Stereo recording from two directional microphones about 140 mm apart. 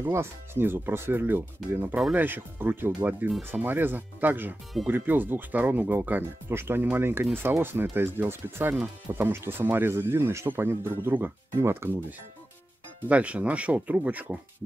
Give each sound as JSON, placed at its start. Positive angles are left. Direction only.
{"t": 0.0, "sound": "speech", "side_deg": -20}
{"t": 13.1, "sound": "speech", "side_deg": -10}